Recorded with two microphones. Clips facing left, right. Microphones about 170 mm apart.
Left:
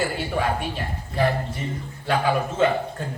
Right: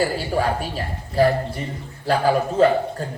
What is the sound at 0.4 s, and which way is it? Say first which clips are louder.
Speech: right 2 dB; 40° right (ahead or behind).